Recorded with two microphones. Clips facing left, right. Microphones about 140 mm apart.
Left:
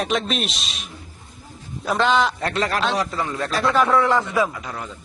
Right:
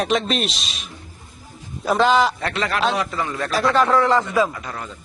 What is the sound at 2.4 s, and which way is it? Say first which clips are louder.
Speech: left 1 dB; 40° left (ahead or behind).